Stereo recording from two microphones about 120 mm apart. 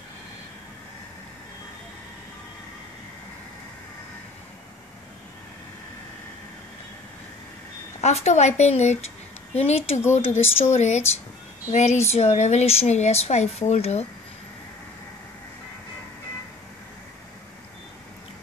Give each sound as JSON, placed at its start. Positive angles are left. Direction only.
{"t": 8.0, "sound": "a woman's voice", "side_deg": 65}